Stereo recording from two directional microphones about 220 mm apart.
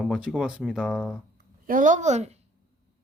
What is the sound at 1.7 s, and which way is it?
Speech, 35° right (ahead or behind).